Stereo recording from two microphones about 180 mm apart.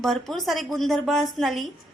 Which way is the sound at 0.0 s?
Centre (ahead or behind).